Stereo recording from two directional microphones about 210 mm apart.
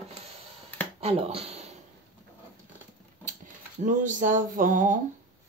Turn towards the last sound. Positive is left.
turn(degrees=-40)  # may be behind; listen again after turning